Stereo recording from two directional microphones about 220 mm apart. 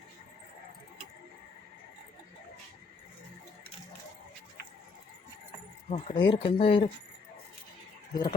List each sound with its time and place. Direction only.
5.9 s speech: 25° left (ahead or behind)
8.1 s speech: 20° left (ahead or behind)